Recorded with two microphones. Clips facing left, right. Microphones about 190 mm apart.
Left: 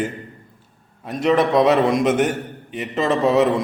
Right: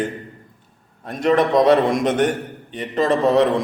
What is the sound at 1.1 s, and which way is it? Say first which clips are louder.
Speech: even; 45° right (ahead or behind).